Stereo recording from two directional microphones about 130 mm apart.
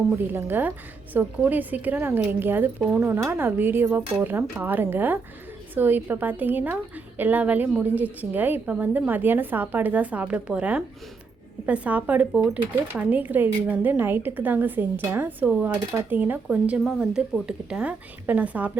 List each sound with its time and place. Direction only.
0.1 s a woman's voice: 15° right (ahead or behind)